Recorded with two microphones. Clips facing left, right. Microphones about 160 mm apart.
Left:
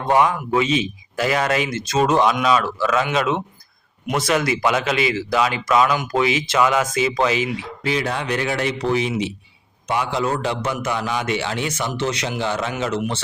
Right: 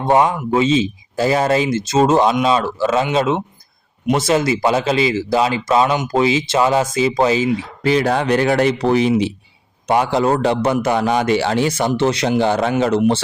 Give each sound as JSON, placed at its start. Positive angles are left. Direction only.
{"t": 0.0, "sound": "a man's voice", "side_deg": -25}